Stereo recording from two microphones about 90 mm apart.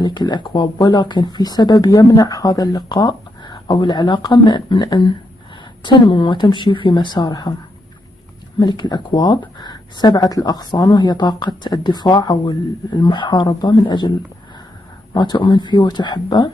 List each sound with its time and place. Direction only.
0.0 s speech: 55° left (ahead or behind)
5.9 s speech: 60° left (ahead or behind)
8.5 s speech: 55° left (ahead or behind)
15.1 s speech: 55° left (ahead or behind)